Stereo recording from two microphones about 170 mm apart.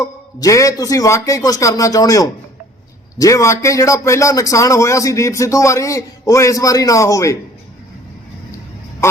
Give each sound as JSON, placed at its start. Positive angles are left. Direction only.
{"t": 0.0, "sound": "a man's voice", "side_deg": 20}